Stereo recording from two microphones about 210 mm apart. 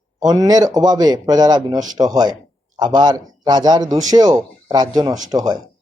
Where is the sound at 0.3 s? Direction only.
20° right (ahead or behind).